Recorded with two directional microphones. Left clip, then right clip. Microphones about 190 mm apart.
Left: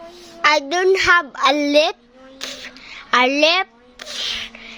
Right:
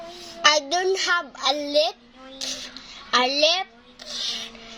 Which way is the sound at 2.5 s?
15° left (ahead or behind).